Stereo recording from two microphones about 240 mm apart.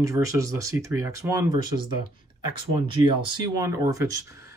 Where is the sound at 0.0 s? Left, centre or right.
Centre.